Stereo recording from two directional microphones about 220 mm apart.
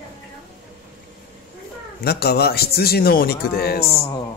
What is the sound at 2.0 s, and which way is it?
Speech, 45° left (ahead or behind).